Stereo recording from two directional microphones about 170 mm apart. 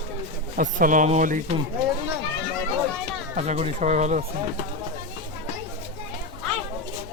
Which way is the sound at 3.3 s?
40° right (ahead or behind).